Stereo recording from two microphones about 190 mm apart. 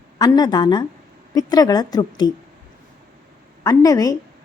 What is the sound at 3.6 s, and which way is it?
Speech, 20° left (ahead or behind).